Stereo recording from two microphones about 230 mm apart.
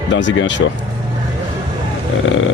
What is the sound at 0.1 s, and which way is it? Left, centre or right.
Speech, left.